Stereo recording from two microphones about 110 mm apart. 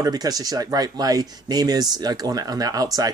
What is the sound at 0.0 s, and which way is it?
Speech, 35° right (ahead or behind).